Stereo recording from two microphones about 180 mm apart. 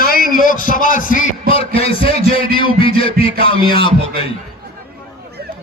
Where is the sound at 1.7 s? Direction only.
30° left (ahead or behind).